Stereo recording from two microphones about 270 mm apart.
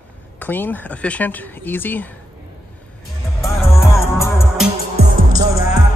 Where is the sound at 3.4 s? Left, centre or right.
Centre.